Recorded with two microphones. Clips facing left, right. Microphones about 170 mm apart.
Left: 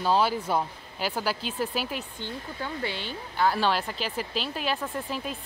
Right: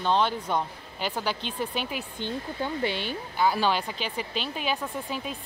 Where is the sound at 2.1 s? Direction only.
20° right (ahead or behind).